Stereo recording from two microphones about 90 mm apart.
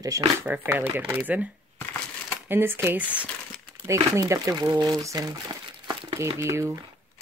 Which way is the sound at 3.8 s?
35° right (ahead or behind).